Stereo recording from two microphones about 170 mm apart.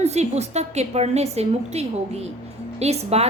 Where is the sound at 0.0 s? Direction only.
40° right (ahead or behind).